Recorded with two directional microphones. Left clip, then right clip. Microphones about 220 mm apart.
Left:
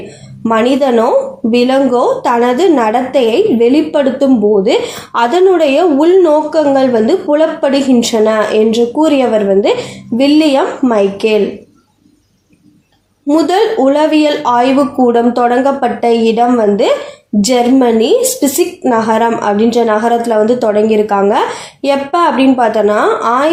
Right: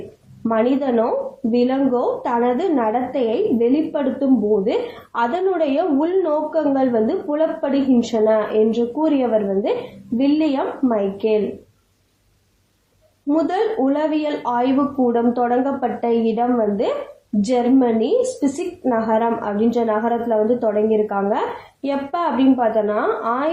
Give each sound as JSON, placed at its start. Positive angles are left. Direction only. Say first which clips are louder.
{"t": 0.4, "sound": "a woman's voice", "louder": "left 8 dB", "side_deg": 45}
{"t": 13.3, "sound": "a woman's voice", "louder": "left 9 dB", "side_deg": 40}